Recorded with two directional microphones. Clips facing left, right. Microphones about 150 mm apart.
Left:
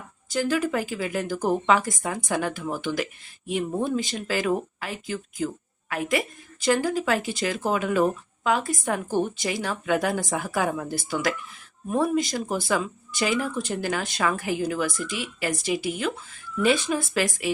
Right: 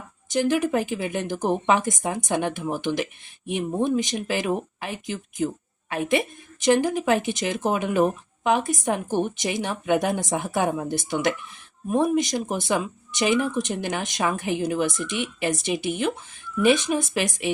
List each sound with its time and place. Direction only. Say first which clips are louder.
0.3 s a woman's voice: right 3 dB; 20° right (ahead or behind)